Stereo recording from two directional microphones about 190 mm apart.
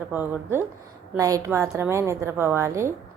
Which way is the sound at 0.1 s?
10° right (ahead or behind).